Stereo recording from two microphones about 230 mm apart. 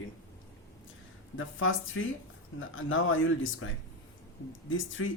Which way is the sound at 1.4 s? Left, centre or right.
Left.